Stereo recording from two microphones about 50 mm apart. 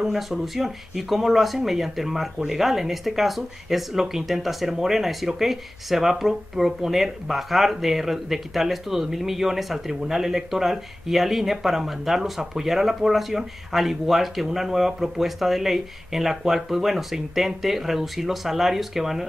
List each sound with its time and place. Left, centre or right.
0.0 s speech: centre